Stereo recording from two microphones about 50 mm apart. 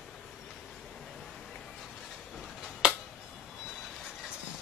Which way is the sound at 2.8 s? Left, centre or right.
Centre.